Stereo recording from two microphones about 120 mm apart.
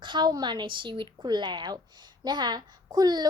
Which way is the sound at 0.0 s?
40° right (ahead or behind).